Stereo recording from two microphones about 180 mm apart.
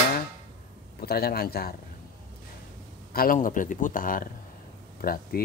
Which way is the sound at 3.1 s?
50° left (ahead or behind).